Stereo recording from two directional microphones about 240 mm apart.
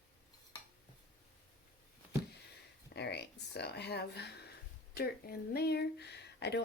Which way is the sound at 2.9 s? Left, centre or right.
Left.